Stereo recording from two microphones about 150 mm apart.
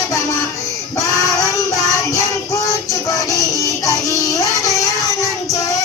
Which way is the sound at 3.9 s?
20° left (ahead or behind).